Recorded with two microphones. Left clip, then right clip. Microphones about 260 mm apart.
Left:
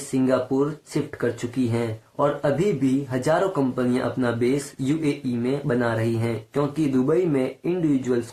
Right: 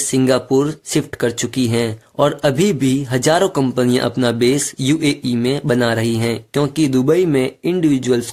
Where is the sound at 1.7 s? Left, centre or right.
Right.